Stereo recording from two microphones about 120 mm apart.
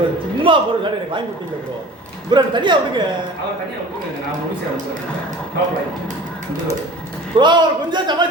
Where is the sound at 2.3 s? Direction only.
40° right (ahead or behind).